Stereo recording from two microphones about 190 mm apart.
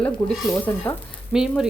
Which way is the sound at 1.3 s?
5° right (ahead or behind).